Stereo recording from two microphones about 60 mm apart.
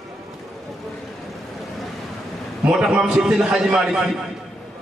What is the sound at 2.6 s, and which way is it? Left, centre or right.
A man's voice, centre.